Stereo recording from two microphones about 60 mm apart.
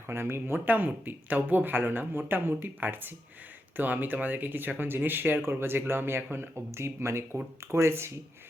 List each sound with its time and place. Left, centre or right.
0.1 s speech: right
0.7 s speech: right